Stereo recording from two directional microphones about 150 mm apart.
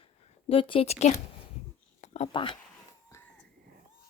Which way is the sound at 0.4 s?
35° left (ahead or behind).